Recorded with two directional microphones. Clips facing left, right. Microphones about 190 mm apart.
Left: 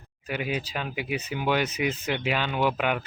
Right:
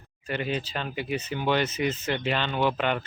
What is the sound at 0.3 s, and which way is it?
Speech, 10° left (ahead or behind).